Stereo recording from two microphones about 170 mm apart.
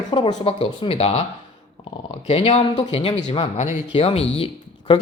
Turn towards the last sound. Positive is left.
turn(degrees=35)  # may be behind; listen again after turning